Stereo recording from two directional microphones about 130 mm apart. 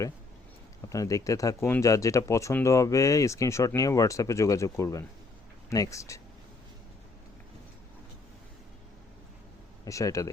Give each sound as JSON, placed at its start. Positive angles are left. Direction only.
{"t": 0.9, "sound": "speech", "side_deg": 25}
{"t": 9.8, "sound": "speech", "side_deg": 25}